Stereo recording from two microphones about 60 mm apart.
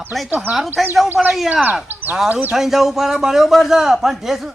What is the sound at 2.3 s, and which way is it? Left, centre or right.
Speech, right.